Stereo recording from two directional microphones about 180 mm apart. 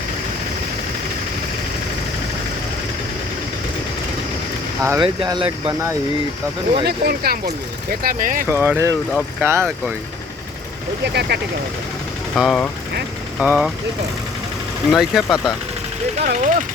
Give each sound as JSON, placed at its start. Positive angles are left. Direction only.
{"t": 4.8, "sound": "speech", "side_deg": -15}
{"t": 6.8, "sound": "speech", "side_deg": -60}
{"t": 8.4, "sound": "speech", "side_deg": -15}
{"t": 11.0, "sound": "speech", "side_deg": -70}
{"t": 12.4, "sound": "speech", "side_deg": 5}
{"t": 14.9, "sound": "speech", "side_deg": 0}
{"t": 16.1, "sound": "speech", "side_deg": -40}